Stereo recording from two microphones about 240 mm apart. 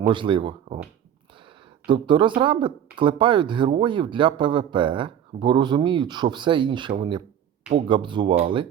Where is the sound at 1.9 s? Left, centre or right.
Right.